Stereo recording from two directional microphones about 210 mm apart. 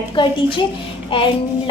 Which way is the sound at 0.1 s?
20° left (ahead or behind).